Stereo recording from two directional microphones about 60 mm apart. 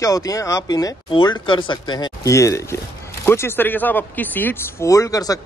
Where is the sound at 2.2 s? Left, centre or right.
Left.